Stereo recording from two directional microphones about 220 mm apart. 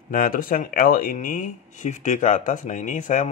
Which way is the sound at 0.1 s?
40° left (ahead or behind).